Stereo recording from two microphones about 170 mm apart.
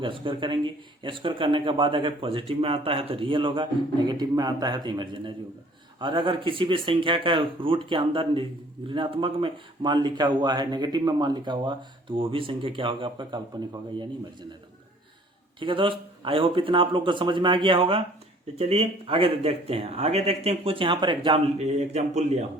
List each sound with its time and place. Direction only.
0.0 s a man's voice: 30° right (ahead or behind)
15.6 s a man's voice: 30° right (ahead or behind)